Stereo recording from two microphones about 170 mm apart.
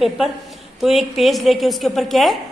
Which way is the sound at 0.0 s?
Centre (ahead or behind).